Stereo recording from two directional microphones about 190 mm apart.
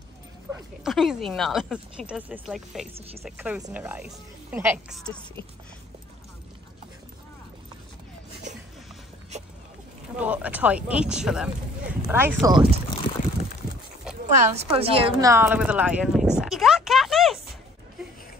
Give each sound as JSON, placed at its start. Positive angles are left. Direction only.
{"t": 0.8, "sound": "speech", "side_deg": 0}
{"t": 4.9, "sound": "speech", "side_deg": 5}
{"t": 10.1, "sound": "speech", "side_deg": -5}
{"t": 14.2, "sound": "a woman's voice", "side_deg": -35}
{"t": 15.1, "sound": "speech", "side_deg": -15}
{"t": 15.4, "sound": "speech", "side_deg": -5}
{"t": 16.3, "sound": "a sound", "side_deg": 0}